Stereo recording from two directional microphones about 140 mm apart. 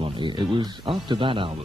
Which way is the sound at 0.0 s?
35° right (ahead or behind).